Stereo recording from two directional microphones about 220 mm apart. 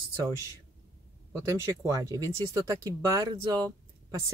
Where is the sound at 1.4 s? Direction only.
15° right (ahead or behind).